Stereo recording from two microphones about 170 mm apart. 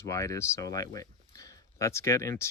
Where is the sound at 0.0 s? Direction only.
15° left (ahead or behind).